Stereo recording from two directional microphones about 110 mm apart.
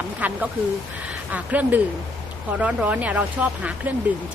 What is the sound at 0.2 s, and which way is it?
Speech, 15° right (ahead or behind).